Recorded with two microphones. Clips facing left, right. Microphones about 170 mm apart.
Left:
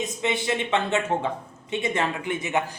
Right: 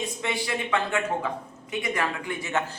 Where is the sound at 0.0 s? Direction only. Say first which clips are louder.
Left 3 dB; 20° left (ahead or behind).